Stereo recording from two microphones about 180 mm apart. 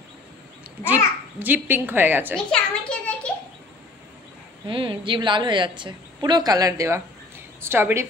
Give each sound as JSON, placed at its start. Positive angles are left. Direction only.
{"t": 0.8, "sound": "a child's voice", "side_deg": -10}
{"t": 2.3, "sound": "a sound", "side_deg": 5}
{"t": 4.6, "sound": "a woman's voice", "side_deg": -30}